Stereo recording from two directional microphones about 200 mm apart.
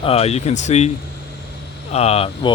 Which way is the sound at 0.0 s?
30° left (ahead or behind).